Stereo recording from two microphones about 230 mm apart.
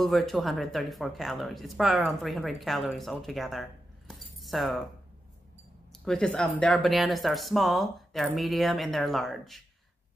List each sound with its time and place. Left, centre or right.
0.0 s speech: centre
4.1 s keys jangling: centre
6.0 s speech: centre